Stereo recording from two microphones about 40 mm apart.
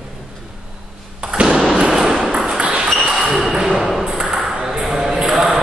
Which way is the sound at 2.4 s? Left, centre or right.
Right.